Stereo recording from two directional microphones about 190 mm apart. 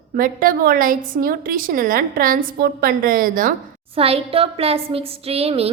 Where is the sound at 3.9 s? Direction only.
30° right (ahead or behind).